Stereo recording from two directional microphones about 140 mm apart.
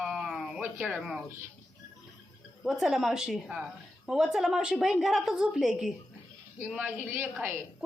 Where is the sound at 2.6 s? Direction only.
Centre (ahead or behind).